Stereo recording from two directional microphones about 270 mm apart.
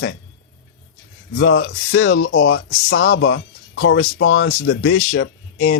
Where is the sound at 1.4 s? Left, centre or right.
Left.